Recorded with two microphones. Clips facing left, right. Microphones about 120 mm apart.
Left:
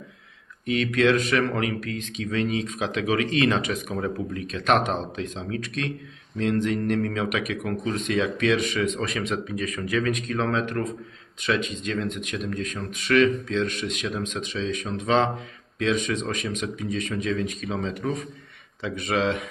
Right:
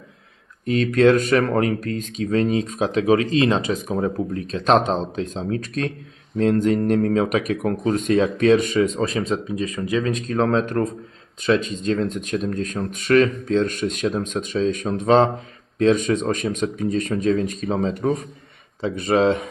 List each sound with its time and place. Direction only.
0.6 s speech: 40° right (ahead or behind)